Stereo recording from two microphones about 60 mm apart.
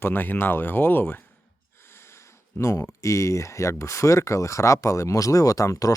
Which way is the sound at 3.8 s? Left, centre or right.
Left.